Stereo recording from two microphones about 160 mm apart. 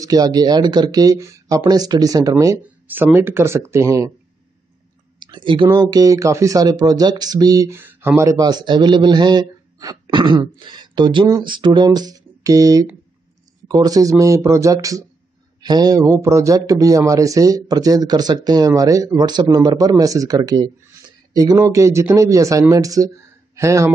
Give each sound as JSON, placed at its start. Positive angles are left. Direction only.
{"t": 0.0, "sound": "speech", "side_deg": -25}
{"t": 5.2, "sound": "speech", "side_deg": -30}